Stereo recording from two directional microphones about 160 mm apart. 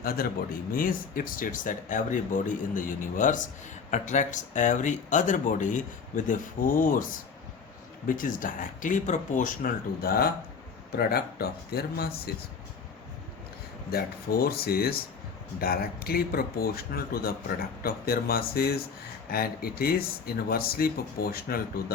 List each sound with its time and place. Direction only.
0.0 s speech: 70° left (ahead or behind); by 9.5 s 55° left (ahead or behind)
10.0 s speech: 70° left (ahead or behind)
13.9 s speech: 70° left (ahead or behind)